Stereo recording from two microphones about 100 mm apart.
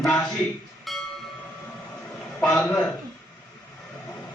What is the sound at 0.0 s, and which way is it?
Speech, 5° left (ahead or behind).